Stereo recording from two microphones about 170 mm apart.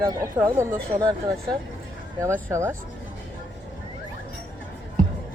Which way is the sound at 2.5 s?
15° right (ahead or behind).